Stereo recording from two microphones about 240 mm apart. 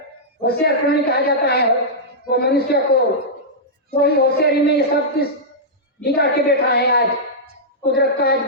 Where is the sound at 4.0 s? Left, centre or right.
Left.